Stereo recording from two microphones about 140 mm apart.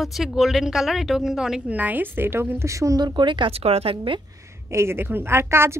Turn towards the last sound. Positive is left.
turn(degrees=-15)  # may be behind; listen again after turning